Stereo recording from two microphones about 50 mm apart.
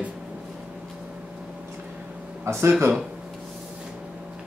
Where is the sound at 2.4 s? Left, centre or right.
Right.